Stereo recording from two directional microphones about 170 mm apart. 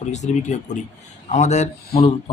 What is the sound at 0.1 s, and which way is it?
Speech, 45° left (ahead or behind).